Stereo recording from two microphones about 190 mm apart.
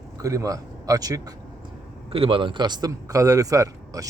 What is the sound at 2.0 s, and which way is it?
A man's voice, 30° right (ahead or behind).